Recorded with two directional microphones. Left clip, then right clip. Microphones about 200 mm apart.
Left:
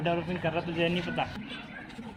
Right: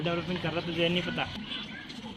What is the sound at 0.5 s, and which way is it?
Speech, 55° left (ahead or behind).